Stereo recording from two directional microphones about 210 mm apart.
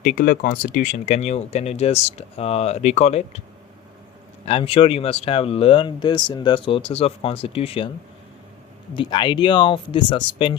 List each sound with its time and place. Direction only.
0.0 s speech: 40° left (ahead or behind)
4.4 s speech: 25° left (ahead or behind)
9.0 s speech: 20° left (ahead or behind)